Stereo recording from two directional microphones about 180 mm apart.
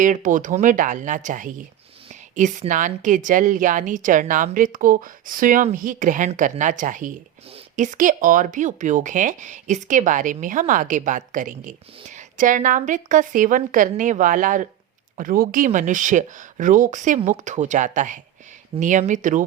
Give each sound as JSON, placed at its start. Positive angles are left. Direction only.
{"t": 0.0, "sound": "speech", "side_deg": -45}